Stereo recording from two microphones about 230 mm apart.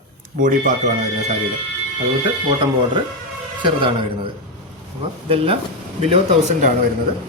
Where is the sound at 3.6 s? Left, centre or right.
Right.